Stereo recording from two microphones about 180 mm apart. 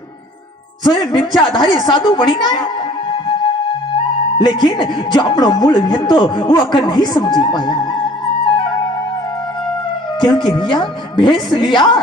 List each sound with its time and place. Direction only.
0.8 s speech: 25° left (ahead or behind)
6.9 s music: 25° left (ahead or behind)
10.2 s speech: 25° left (ahead or behind)